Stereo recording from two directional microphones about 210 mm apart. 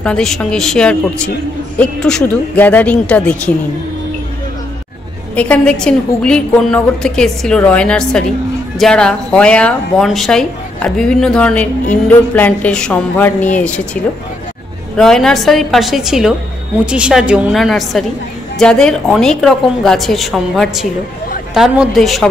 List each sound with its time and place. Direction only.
0.0 s speech: 5° left (ahead or behind)
5.3 s speech: 5° left (ahead or behind)
15.0 s speech: centre (ahead or behind)